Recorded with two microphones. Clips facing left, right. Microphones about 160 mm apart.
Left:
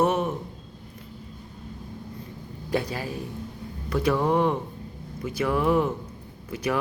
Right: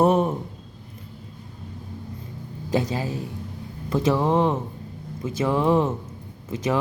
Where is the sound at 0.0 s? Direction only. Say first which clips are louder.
Right 4 dB; 35° right (ahead or behind).